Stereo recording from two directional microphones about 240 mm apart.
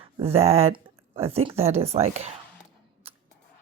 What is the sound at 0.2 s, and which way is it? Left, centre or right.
A woman's voice, right.